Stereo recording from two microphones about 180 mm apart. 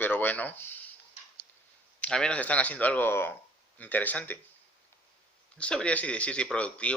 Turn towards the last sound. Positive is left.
turn(degrees=5)  # may be behind; listen again after turning